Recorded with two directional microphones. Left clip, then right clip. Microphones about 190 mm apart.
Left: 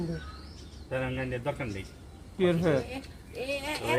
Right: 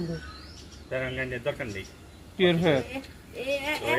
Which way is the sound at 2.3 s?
25° right (ahead or behind).